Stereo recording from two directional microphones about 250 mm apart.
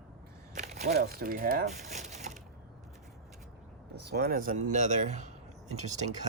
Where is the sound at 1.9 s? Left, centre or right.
Right.